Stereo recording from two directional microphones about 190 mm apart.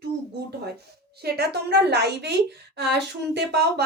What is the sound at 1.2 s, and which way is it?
Speech, 60° right (ahead or behind).